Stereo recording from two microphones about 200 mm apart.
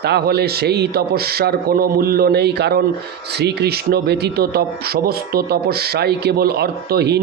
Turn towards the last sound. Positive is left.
turn(degrees=-55)  # may be behind; listen again after turning